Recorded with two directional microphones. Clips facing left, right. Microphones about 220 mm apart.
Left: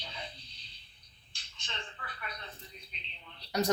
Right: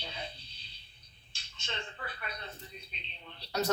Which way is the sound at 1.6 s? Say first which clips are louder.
Right 4 dB; 30° right (ahead or behind).